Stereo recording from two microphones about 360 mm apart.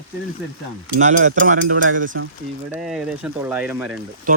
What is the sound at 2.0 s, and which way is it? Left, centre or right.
Speech, right.